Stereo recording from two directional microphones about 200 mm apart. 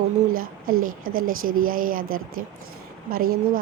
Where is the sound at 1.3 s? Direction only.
90° right.